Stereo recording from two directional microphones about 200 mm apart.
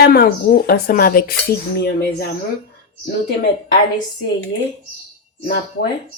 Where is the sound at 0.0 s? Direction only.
50° left (ahead or behind).